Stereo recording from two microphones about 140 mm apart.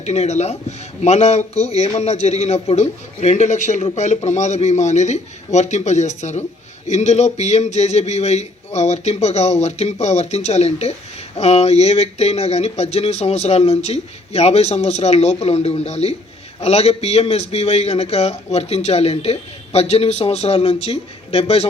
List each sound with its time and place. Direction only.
0.0 s a man's voice: 50° left (ahead or behind)